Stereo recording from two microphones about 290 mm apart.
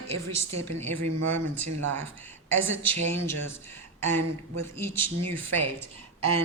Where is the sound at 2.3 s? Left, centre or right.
Centre.